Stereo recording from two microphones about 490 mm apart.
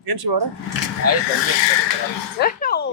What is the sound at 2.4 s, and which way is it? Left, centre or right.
Speech, centre.